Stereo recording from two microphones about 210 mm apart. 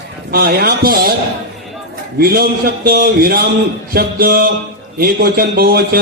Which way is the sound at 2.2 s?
45° right (ahead or behind).